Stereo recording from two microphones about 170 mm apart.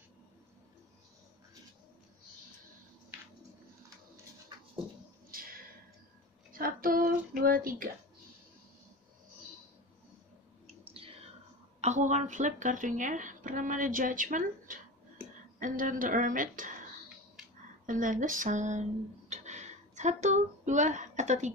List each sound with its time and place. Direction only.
4.5 s dog: 25° right (ahead or behind)
5.3 s a sound: 55° right (ahead or behind)
6.5 s child singing: 55° right (ahead or behind)
10.9 s whispering: 35° right (ahead or behind)
11.8 s a woman's voice: 45° right (ahead or behind)
17.8 s speech: 50° right (ahead or behind)